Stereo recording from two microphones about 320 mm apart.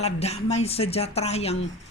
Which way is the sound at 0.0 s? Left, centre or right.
Centre.